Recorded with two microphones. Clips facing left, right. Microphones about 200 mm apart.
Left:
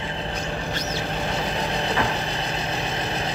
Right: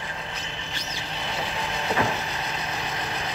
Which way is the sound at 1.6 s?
35° left (ahead or behind).